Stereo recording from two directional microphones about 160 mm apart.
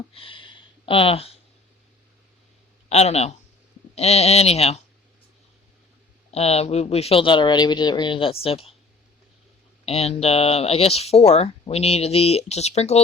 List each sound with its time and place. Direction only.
0.1 s a sound: 35° left (ahead or behind)
2.9 s speech: 40° left (ahead or behind)
6.3 s speech: 40° left (ahead or behind)
9.8 s speech: 40° left (ahead or behind)